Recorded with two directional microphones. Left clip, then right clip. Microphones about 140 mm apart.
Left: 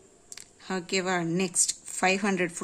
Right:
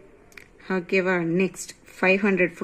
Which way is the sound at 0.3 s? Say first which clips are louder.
Right 5 dB; 15° left (ahead or behind).